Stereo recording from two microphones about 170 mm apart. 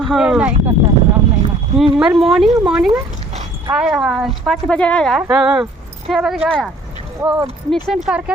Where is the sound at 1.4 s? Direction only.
35° right (ahead or behind).